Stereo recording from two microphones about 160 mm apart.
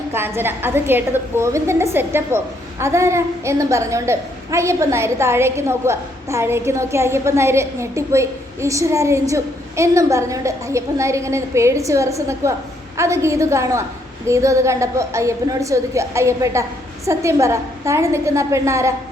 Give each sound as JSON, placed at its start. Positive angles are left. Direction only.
{"t": 0.1, "sound": "a woman's voice", "side_deg": -15}